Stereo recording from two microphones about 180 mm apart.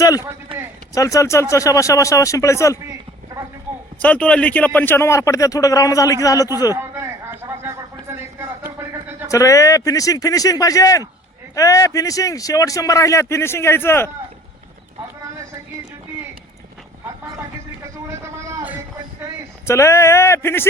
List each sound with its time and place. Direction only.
0.9 s speech: 15° left (ahead or behind)
4.0 s speech: 5° left (ahead or behind)
6.7 s a sound: 15° right (ahead or behind)
9.3 s speech: 15° left (ahead or behind)
18.1 s vehicle: 15° right (ahead or behind)
19.6 s speech: 15° left (ahead or behind)